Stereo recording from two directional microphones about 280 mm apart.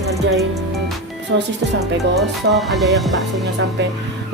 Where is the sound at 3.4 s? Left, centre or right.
Right.